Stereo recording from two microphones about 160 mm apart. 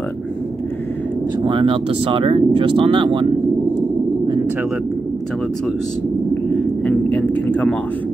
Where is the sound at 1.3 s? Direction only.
30° right (ahead or behind).